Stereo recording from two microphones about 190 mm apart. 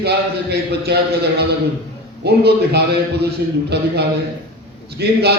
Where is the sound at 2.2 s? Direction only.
60° right (ahead or behind).